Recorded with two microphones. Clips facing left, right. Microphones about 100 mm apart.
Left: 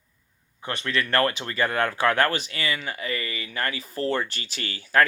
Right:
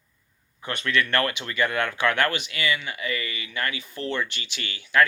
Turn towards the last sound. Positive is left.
turn(degrees=40)  # may be behind; listen again after turning